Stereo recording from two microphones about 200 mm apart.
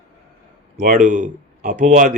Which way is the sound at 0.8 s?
40° right (ahead or behind).